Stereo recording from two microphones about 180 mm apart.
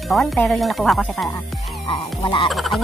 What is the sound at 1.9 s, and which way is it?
Music, 25° left (ahead or behind).